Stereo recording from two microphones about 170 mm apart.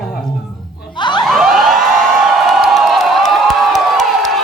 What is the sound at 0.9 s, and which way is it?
Snicker, 25° left (ahead or behind).